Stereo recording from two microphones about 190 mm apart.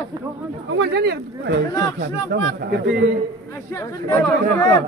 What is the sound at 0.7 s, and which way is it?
Speech, 60° right (ahead or behind).